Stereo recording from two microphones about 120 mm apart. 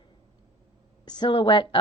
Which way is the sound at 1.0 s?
35° left (ahead or behind).